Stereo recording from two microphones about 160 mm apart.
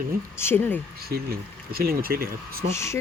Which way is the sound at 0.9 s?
75° right (ahead or behind).